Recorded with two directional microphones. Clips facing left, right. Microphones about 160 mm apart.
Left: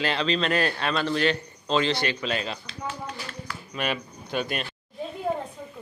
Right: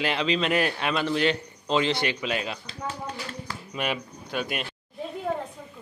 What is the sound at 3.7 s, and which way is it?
Speech, 15° right (ahead or behind).